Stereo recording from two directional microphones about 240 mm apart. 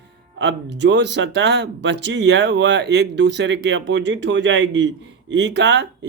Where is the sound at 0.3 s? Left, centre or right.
Right.